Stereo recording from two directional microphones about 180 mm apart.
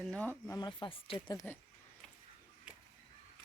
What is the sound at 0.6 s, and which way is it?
Speech, 25° left (ahead or behind).